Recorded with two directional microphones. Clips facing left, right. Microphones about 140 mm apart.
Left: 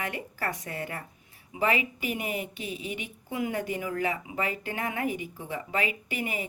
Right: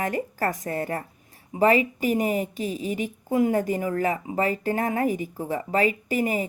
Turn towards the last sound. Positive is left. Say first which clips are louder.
# right 9 dB
turn(degrees=-40)  # may be behind; listen again after turning